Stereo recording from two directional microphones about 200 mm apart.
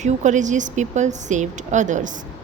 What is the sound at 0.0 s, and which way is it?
A woman's voice, 35° right (ahead or behind).